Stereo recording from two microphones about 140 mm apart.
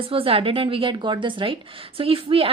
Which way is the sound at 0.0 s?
40° right (ahead or behind).